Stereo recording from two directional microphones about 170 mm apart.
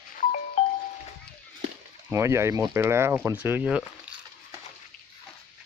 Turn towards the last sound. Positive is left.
turn(degrees=-5)  # may be behind; listen again after turning